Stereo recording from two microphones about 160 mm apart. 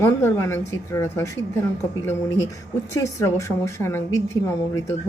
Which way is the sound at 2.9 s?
20° left (ahead or behind).